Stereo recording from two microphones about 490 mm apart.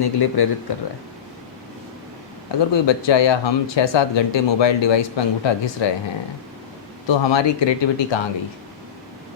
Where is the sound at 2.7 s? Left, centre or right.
Left.